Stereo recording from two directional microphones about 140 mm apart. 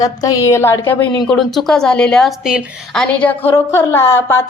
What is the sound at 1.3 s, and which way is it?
A woman's voice, centre (ahead or behind).